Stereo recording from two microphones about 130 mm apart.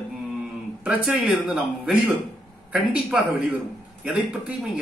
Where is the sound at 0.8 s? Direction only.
10° right (ahead or behind).